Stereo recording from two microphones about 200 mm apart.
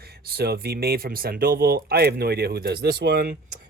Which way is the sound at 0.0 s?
50° right (ahead or behind).